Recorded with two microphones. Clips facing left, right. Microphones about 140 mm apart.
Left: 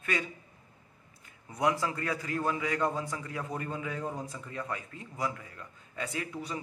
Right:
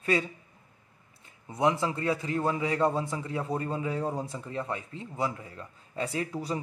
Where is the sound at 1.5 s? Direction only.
25° right (ahead or behind).